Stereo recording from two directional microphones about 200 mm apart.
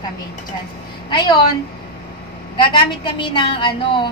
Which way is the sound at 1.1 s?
20° left (ahead or behind).